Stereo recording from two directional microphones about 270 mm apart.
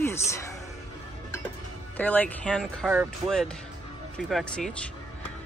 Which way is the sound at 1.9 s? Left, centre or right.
Centre.